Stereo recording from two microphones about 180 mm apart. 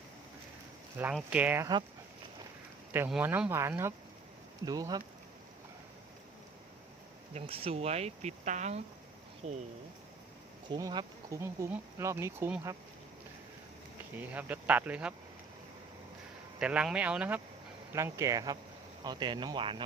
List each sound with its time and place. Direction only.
1.1 s speech: 5° right (ahead or behind)
3.1 s speech: 10° right (ahead or behind)
7.3 s speech: 30° right (ahead or behind)
10.7 s speech: 20° right (ahead or behind)
14.2 s speech: 10° right (ahead or behind)
16.6 s speech: 5° right (ahead or behind); by 19.8 s 25° right (ahead or behind)